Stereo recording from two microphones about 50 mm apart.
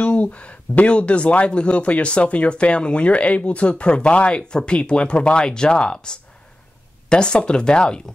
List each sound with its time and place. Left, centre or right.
0.0 s speech: left